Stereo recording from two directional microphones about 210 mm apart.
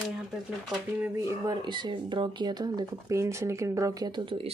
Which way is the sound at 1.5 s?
20° right (ahead or behind).